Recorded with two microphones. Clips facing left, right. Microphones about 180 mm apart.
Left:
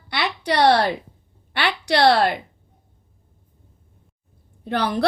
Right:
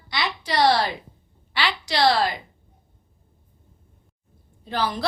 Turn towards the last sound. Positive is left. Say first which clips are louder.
# left 4 dB
turn(degrees=65)  # may be behind; listen again after turning